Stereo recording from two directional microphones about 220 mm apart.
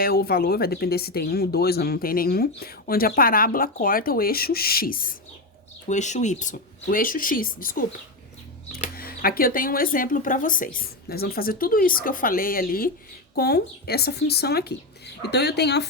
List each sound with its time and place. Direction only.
0.0 s speech: 45° left (ahead or behind)